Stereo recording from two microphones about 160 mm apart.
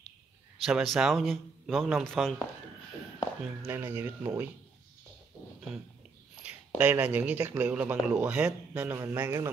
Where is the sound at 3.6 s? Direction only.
15° right (ahead or behind).